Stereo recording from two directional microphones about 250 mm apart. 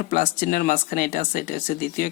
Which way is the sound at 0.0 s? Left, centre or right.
Left.